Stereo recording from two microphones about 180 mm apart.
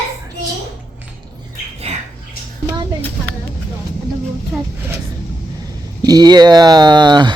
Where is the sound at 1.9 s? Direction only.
35° right (ahead or behind).